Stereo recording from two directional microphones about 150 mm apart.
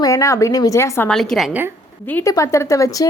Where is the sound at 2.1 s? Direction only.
15° left (ahead or behind).